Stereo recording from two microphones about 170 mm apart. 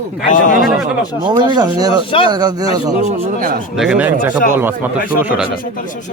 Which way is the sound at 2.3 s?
25° right (ahead or behind).